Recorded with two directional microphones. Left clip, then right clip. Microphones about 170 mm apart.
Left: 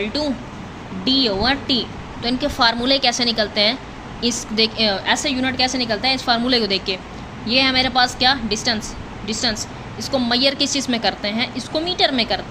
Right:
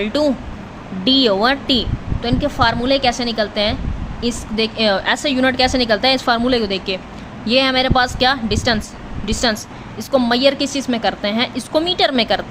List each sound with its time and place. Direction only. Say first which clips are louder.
0.0 s a woman's voice: right 5 dB; 35° right (ahead or behind)
2.2 s a woman's voice: right 1 dB; 15° right (ahead or behind)
4.9 s a woman's voice: right 3 dB; 25° right (ahead or behind)
6.5 s a woman's voice: right 1 dB; 15° right (ahead or behind)
7.4 s a woman's voice: right 2 dB; 30° right (ahead or behind)